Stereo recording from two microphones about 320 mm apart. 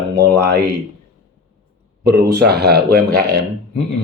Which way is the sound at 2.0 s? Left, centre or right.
Right.